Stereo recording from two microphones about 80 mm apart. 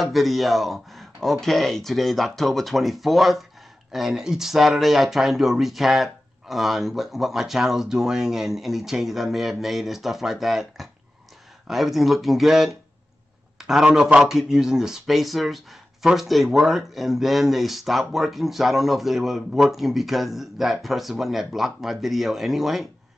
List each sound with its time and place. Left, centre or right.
0.0 s speech: centre